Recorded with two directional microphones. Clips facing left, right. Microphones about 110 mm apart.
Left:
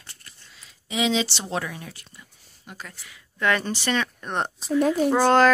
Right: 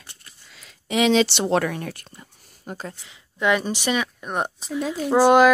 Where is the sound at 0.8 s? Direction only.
60° right (ahead or behind).